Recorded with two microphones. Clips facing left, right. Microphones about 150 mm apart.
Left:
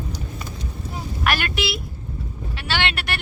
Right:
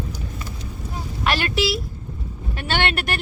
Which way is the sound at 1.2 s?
30° right (ahead or behind).